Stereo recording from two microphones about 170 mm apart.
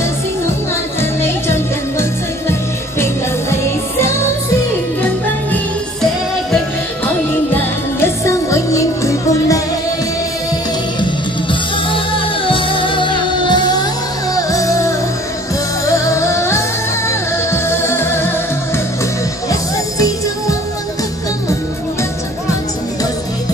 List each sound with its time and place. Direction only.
1.2 s music: 15° left (ahead or behind)
7.5 s music: 15° left (ahead or behind)
11.9 s music: 30° left (ahead or behind); by 18.3 s 15° left (ahead or behind)
19.5 s music: 20° left (ahead or behind)